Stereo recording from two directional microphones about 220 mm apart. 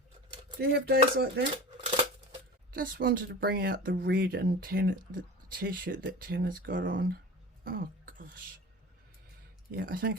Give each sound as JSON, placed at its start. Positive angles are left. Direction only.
{"t": 0.6, "sound": "speech", "side_deg": -45}
{"t": 2.7, "sound": "speech", "side_deg": -40}
{"t": 7.6, "sound": "cough", "side_deg": -40}
{"t": 9.7, "sound": "speech", "side_deg": -40}